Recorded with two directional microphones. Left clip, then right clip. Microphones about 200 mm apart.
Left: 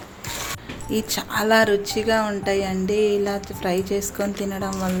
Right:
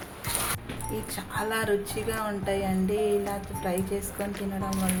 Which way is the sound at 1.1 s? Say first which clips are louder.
Left 12 dB; 50° left (ahead or behind).